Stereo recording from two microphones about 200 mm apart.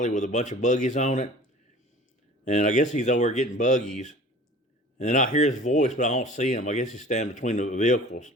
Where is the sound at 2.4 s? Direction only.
40° left (ahead or behind).